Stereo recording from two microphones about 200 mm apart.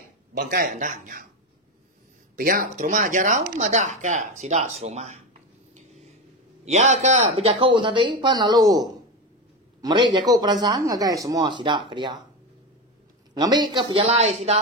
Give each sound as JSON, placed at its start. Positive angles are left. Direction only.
{"t": 0.4, "sound": "speech", "side_deg": -45}
{"t": 2.3, "sound": "speech", "side_deg": -45}
{"t": 6.6, "sound": "a man's voice", "side_deg": -35}
{"t": 13.3, "sound": "a man's voice", "side_deg": -20}